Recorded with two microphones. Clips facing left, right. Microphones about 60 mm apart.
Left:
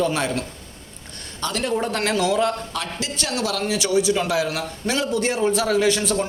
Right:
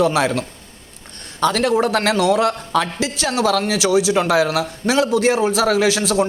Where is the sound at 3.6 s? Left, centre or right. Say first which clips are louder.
Right 3 dB; right.